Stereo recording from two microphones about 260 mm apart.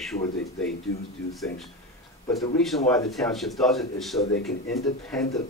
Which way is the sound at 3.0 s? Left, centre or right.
Centre.